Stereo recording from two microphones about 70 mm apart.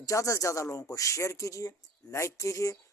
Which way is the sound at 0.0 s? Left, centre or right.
Left.